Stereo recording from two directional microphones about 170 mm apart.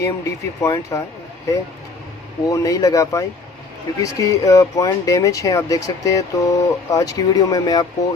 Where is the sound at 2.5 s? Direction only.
20° left (ahead or behind).